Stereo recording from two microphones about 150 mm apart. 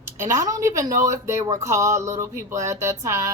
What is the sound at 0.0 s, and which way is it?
Speech, 20° right (ahead or behind).